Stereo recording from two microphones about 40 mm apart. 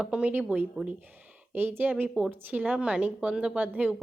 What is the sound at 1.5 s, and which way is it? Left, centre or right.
Speech, right.